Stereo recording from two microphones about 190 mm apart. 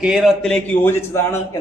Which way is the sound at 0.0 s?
Centre (ahead or behind).